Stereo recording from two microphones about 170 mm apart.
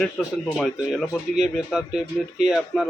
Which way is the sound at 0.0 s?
Centre (ahead or behind).